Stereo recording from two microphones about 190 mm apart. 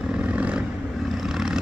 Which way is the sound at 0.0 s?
5° right (ahead or behind).